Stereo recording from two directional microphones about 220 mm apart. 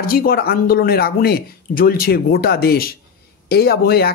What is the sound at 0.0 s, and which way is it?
Speech, 40° left (ahead or behind).